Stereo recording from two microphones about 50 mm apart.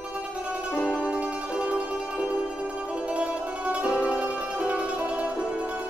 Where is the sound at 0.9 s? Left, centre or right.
Right.